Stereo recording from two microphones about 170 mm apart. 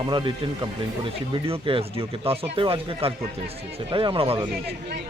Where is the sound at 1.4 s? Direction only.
35° right (ahead or behind).